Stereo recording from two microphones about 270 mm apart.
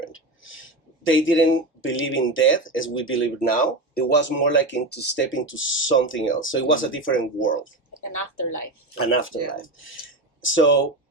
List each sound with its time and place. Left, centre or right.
1.0 s speech: left
3.4 s speech: left
8.1 s a woman's voice: left
9.0 s speech: left
10.4 s speech: left